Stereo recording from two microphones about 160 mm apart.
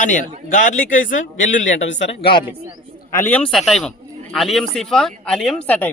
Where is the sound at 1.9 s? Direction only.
85° left.